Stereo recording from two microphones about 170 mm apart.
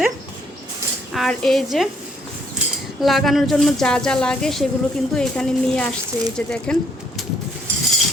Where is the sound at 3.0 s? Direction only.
Centre (ahead or behind).